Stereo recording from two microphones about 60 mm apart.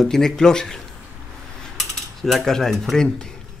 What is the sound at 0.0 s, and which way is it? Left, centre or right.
Speech, centre.